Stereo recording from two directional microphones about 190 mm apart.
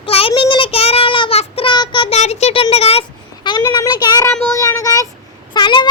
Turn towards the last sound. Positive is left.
turn(degrees=25)  # may be behind; listen again after turning